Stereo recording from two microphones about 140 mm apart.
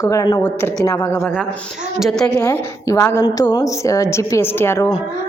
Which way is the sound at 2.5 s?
20° left (ahead or behind).